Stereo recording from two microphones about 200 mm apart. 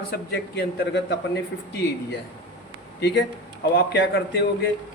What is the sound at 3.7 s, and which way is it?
Speech, 55° left (ahead or behind).